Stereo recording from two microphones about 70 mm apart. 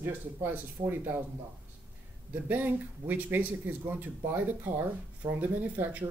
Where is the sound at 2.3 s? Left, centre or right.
Right.